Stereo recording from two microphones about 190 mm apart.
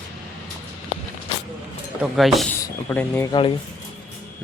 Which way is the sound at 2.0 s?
Centre (ahead or behind).